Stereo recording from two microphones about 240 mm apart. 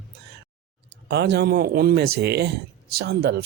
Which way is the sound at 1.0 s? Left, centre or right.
Right.